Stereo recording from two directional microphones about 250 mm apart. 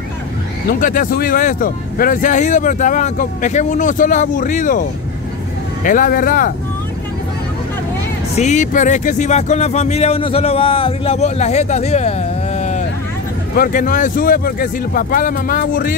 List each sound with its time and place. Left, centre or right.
0.7 s speech: left
5.9 s speech: left
8.4 s speech: left